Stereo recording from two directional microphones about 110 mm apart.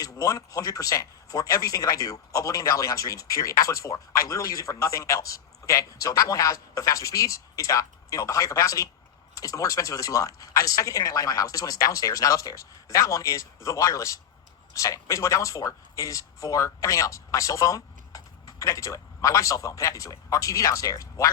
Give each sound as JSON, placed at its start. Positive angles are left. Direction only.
{"t": 0.0, "sound": "speech", "side_deg": 30}